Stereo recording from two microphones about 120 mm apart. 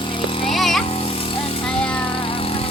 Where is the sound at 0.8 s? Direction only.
55° left (ahead or behind).